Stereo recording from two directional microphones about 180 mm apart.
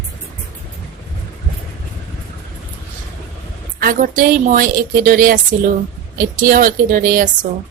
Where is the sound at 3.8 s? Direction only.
50° right (ahead or behind).